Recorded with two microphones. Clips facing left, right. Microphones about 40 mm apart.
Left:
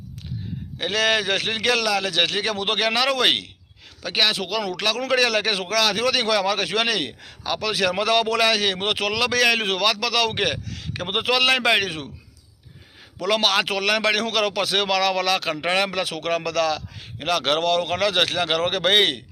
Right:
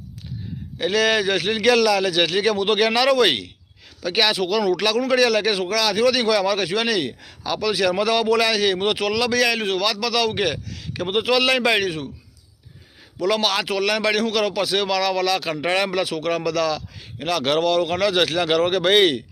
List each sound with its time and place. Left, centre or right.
0.8 s speech: left
4.0 s speech: centre
4.9 s speech: left
7.2 s speech: left
7.6 s speech: left
13.2 s speech: left
15.8 s speech: left